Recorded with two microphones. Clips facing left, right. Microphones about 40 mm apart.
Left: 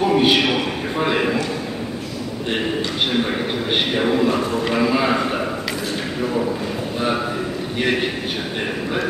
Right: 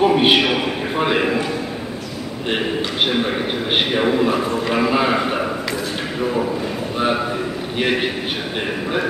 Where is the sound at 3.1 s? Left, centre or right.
Centre.